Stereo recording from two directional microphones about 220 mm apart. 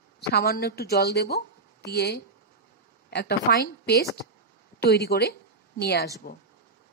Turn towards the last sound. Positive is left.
turn(degrees=45)  # may be behind; listen again after turning